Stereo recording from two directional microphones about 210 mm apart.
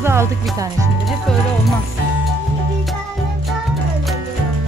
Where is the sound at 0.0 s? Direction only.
10° right (ahead or behind).